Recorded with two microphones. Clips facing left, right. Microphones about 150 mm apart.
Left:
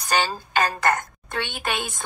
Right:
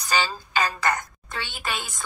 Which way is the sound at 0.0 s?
55° left (ahead or behind).